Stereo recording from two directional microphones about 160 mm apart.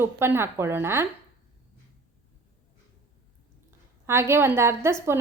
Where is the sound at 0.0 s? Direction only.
15° right (ahead or behind).